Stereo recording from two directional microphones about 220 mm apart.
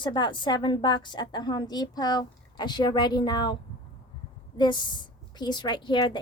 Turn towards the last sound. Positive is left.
turn(degrees=20)  # may be behind; listen again after turning